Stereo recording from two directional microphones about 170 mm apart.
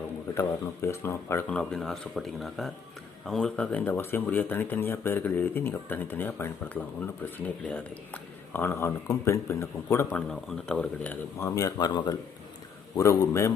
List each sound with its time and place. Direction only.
0.3 s speech: 15° left (ahead or behind)